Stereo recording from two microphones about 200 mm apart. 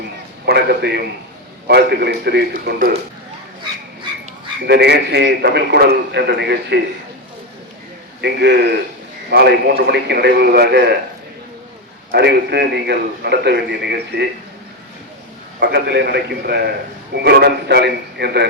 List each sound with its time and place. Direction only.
0.4 s a man's voice: 55° right (ahead or behind)
4.6 s a man's voice: 55° right (ahead or behind)
8.2 s a man's voice: 55° right (ahead or behind)
12.1 s a man's voice: 55° right (ahead or behind)
15.6 s a man's voice: 55° right (ahead or behind)